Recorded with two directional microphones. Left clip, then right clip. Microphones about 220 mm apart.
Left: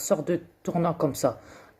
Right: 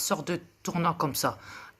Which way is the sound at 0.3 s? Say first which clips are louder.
Left 5 dB; 25° right (ahead or behind).